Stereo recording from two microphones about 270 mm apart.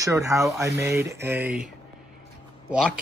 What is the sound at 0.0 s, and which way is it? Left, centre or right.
Speech, centre.